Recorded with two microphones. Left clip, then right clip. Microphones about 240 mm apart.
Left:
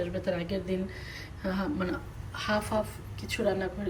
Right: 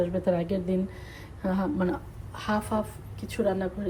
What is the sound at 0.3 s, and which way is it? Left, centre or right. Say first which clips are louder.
A woman's voice: right 4 dB; centre.